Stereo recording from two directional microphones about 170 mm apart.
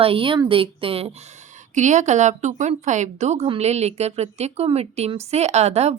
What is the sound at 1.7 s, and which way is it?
A woman's voice, 45° right (ahead or behind).